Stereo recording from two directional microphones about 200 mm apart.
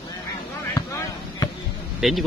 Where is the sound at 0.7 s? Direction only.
15° left (ahead or behind).